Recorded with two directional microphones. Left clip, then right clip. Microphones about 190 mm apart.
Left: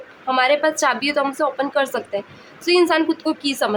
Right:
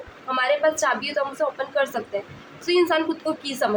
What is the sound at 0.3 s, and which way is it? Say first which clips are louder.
A woman's voice: left 4 dB; 35° left (ahead or behind).